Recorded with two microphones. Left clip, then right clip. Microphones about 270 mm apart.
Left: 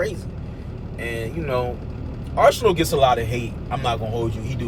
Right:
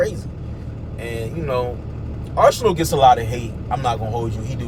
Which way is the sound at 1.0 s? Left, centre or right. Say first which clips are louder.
Right 1 dB; centre.